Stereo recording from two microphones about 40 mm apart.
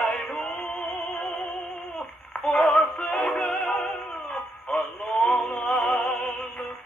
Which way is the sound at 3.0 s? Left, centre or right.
Left.